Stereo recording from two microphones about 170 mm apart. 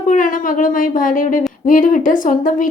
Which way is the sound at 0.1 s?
50° left (ahead or behind).